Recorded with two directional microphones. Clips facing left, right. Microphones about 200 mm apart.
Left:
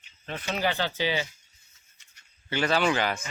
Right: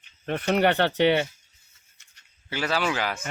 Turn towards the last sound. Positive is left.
turn(degrees=-5)  # may be behind; listen again after turning